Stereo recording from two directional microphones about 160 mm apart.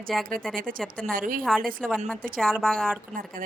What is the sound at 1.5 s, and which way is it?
Speech, 5° left (ahead or behind).